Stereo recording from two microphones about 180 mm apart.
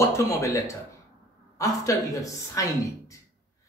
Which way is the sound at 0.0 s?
20° left (ahead or behind).